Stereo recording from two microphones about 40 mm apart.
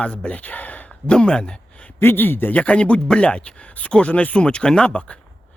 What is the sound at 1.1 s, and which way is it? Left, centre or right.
Speech, left.